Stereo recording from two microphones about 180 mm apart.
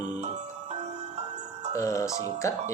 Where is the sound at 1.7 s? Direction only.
15° left (ahead or behind).